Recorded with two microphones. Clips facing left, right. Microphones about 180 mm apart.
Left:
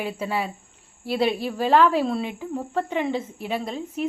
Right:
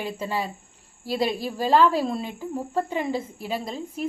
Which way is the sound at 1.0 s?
40° right (ahead or behind).